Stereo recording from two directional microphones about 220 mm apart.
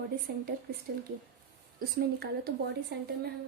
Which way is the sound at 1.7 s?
45° right (ahead or behind).